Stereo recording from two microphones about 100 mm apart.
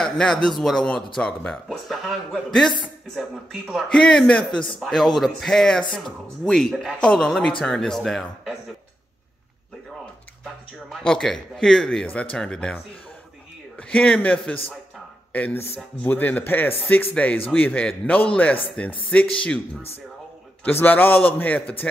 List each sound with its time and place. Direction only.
0.0 s speech: 5° left (ahead or behind)
3.9 s a man's voice: 10° left (ahead or behind)
10.4 s a man's voice: centre (ahead or behind)
20.6 s a man's voice: 20° left (ahead or behind)